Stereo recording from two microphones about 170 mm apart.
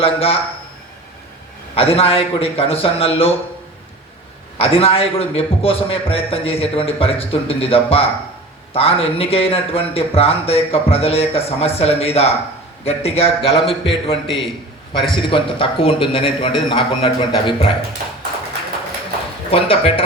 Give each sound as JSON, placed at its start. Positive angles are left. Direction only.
{"t": 0.0, "sound": "speech", "side_deg": 35}
{"t": 1.7, "sound": "speech", "side_deg": 35}
{"t": 4.5, "sound": "speech", "side_deg": 35}
{"t": 19.5, "sound": "speech", "side_deg": 35}